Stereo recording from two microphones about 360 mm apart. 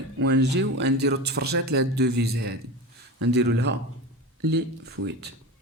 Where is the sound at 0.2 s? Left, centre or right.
Right.